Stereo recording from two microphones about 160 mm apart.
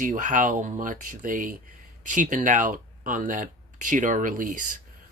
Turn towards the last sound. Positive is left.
turn(degrees=-55)  # may be behind; listen again after turning